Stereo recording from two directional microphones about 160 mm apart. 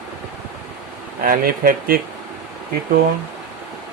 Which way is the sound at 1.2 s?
65° right (ahead or behind).